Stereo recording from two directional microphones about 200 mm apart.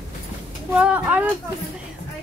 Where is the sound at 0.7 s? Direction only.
5° right (ahead or behind).